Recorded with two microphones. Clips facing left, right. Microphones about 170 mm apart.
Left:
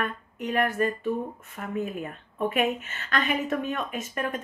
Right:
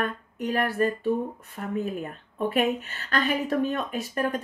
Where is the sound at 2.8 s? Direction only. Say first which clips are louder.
Right 2 dB; 35° right (ahead or behind).